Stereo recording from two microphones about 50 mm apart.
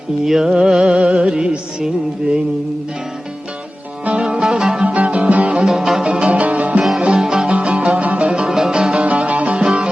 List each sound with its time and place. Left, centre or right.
0.3 s music: centre
4.0 s music: right
5.6 s music: centre; by 6.8 s right
7.0 s music: centre
8.3 s music: centre
9.0 s music: right
9.5 s music: centre